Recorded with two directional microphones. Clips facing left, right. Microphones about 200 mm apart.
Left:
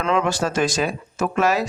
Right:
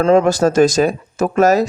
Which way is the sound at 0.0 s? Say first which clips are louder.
Right 9 dB; 40° right (ahead or behind).